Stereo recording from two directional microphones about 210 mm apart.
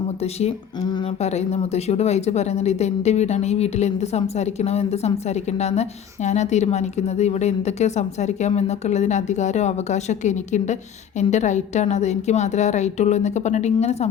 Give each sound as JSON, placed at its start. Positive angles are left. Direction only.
{"t": 0.2, "sound": "speech", "side_deg": 30}